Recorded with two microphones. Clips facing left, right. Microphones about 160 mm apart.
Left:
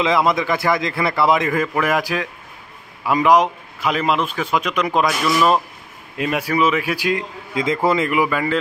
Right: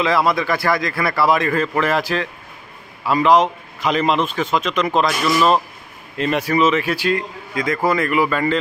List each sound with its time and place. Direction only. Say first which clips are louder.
0.0 s a man's voice: even; 20° left (ahead or behind)